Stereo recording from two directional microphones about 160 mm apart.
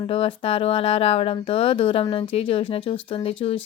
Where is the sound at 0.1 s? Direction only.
35° left (ahead or behind).